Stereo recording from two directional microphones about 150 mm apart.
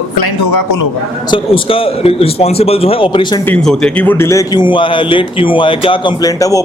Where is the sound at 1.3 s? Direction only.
35° left (ahead or behind).